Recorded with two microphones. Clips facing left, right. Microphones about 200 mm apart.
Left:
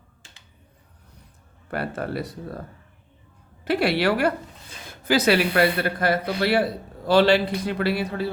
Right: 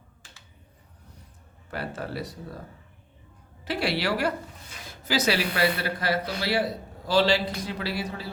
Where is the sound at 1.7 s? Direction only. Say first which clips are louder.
Left 5 dB; 55° left (ahead or behind).